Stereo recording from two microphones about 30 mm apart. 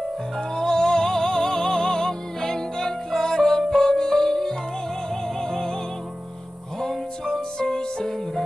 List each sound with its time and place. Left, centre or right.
0.6 s music: centre
7.5 s music: left